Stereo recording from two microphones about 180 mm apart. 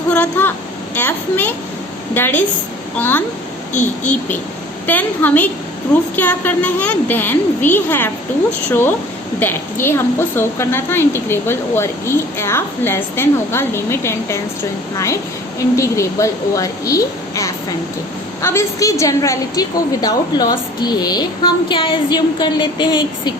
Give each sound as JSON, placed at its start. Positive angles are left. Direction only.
{"t": 0.1, "sound": "a woman's voice", "side_deg": 10}
{"t": 4.9, "sound": "a woman's voice", "side_deg": 10}